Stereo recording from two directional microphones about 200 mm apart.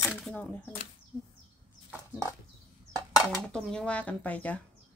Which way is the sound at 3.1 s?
Centre (ahead or behind).